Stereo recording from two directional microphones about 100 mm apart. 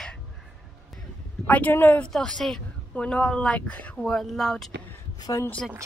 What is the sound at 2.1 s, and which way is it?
Speech, 5° left (ahead or behind).